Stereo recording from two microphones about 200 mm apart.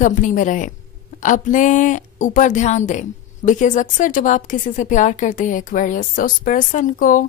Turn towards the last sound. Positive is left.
turn(degrees=40)  # may be behind; listen again after turning